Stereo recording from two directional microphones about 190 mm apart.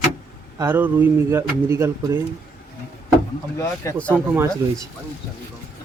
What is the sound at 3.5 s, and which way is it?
Speech, 15° left (ahead or behind).